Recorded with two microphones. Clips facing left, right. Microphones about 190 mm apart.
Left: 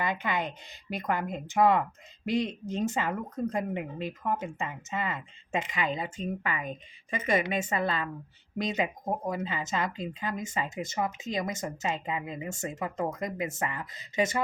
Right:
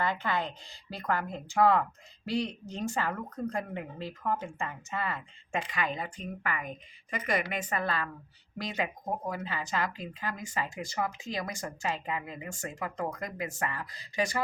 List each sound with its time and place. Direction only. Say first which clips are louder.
0.0 s speech: even; 15° left (ahead or behind)